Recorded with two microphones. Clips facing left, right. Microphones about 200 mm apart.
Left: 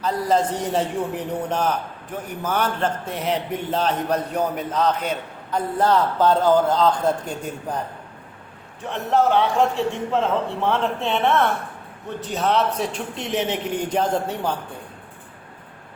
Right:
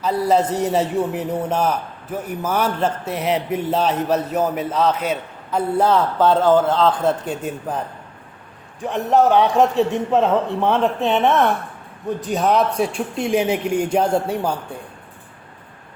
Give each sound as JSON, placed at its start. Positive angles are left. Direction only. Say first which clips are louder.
{"t": 0.0, "sound": "a man's voice", "louder": "right 3 dB", "side_deg": -10}
{"t": 8.8, "sound": "a man's voice", "louder": "right 4 dB", "side_deg": -15}